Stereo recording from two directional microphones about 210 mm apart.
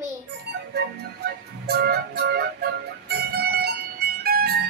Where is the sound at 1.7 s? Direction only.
50° right (ahead or behind).